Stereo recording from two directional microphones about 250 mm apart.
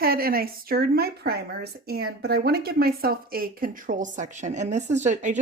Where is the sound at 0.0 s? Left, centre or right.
Right.